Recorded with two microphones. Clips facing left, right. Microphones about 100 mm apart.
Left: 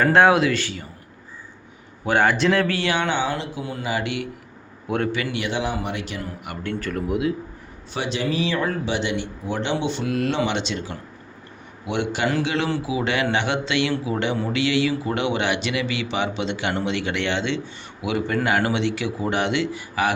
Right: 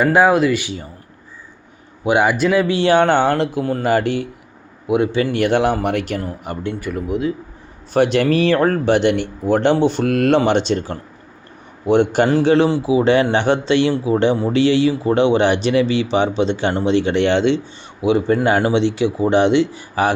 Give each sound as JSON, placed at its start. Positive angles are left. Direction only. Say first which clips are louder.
{"t": 0.0, "sound": "speech", "louder": "right 3 dB", "side_deg": -5}
{"t": 0.6, "sound": "a man's voice", "louder": "right 3 dB", "side_deg": -20}
{"t": 2.0, "sound": "speech", "louder": "right 3 dB", "side_deg": -15}
{"t": 2.8, "sound": "speech", "louder": "right 10 dB", "side_deg": -40}
{"t": 3.1, "sound": "speech", "louder": "right 9 dB", "side_deg": -60}
{"t": 4.9, "sound": "speech", "louder": "right 7 dB", "side_deg": -5}
{"t": 5.3, "sound": "speech", "louder": "right 9 dB", "side_deg": -55}
{"t": 6.4, "sound": "speech", "louder": "right 6 dB", "side_deg": -30}
{"t": 6.7, "sound": "speech", "louder": "right 2 dB", "side_deg": -10}
{"t": 7.1, "sound": "speech", "louder": "right 2 dB", "side_deg": 0}
{"t": 7.9, "sound": "a man's voice", "louder": "right 10 dB", "side_deg": -55}